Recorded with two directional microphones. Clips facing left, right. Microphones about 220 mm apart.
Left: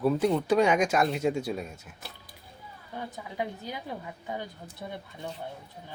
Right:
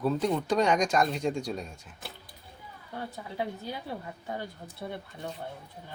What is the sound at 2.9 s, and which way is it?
Speech, 15° left (ahead or behind).